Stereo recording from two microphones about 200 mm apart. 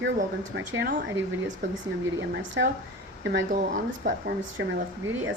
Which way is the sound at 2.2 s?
65° right (ahead or behind).